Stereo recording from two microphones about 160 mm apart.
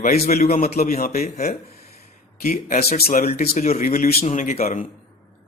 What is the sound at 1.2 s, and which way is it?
Speech, 45° left (ahead or behind).